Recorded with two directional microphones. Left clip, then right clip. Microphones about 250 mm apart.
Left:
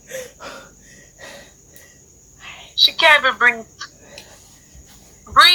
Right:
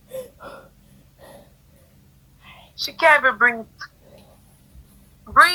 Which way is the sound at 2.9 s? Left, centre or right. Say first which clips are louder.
Right 2 dB; centre.